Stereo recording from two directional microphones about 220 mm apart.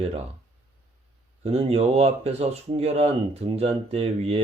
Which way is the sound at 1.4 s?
25° right (ahead or behind).